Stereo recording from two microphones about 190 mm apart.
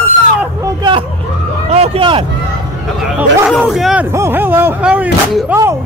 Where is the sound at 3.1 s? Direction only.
5° right (ahead or behind).